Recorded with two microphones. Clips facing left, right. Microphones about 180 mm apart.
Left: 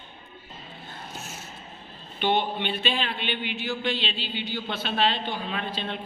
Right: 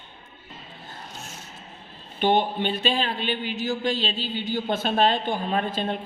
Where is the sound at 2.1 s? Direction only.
45° right (ahead or behind).